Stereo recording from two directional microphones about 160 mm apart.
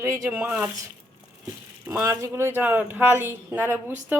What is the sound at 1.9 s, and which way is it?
Speech, 15° right (ahead or behind).